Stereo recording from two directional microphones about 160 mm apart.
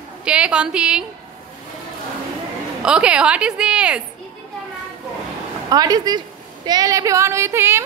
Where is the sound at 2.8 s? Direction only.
5° right (ahead or behind).